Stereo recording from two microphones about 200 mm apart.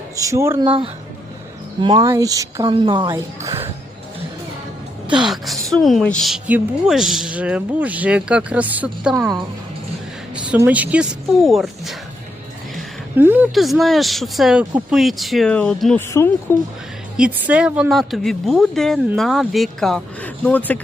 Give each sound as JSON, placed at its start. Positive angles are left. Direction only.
{"t": 0.2, "sound": "a woman's voice", "side_deg": -15}
{"t": 0.6, "sound": "a woman's voice", "side_deg": -25}
{"t": 5.0, "sound": "a woman's voice", "side_deg": -5}
{"t": 10.3, "sound": "a woman's voice", "side_deg": -5}
{"t": 13.1, "sound": "a woman's voice", "side_deg": -10}
{"t": 17.2, "sound": "a woman's voice", "side_deg": -5}